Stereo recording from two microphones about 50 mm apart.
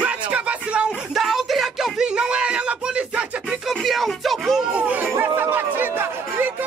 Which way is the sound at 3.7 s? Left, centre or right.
Centre.